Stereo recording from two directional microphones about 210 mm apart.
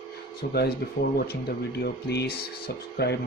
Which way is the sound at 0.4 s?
40° left (ahead or behind).